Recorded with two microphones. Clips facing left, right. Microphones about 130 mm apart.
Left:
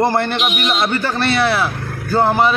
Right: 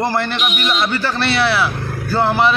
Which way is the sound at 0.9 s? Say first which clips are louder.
Left 1 dB; 50° left (ahead or behind).